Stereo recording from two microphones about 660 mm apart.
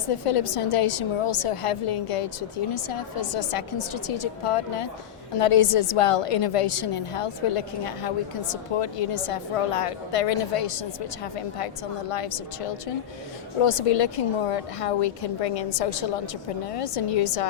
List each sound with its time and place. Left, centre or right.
0.1 s a woman's voice: left